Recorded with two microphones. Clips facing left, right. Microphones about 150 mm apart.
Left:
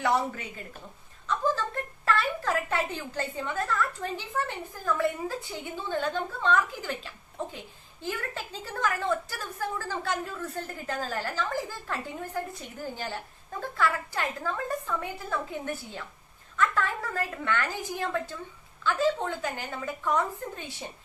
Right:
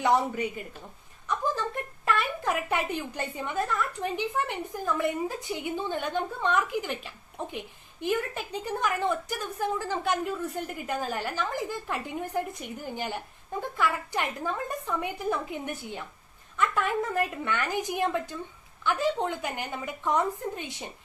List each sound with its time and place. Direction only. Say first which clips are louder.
0.0 s a woman's voice: right 3 dB; 15° right (ahead or behind)